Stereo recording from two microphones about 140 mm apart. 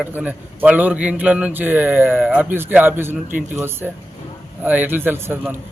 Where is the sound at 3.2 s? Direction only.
70° right (ahead or behind).